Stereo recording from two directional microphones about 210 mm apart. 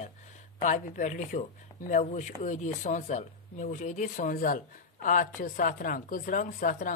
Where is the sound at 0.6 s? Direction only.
35° left (ahead or behind).